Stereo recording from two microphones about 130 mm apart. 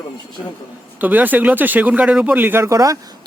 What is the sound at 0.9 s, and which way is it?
Speech, 15° right (ahead or behind).